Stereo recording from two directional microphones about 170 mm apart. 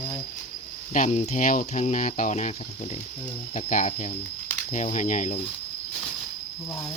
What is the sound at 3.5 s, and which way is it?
Speech, 45° left (ahead or behind).